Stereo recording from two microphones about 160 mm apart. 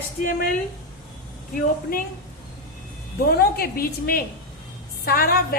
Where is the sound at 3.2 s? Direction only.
65° left (ahead or behind).